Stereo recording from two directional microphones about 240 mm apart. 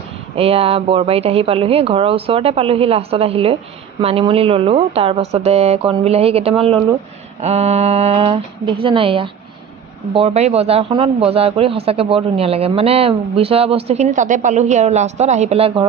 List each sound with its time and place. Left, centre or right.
0.3 s speech: right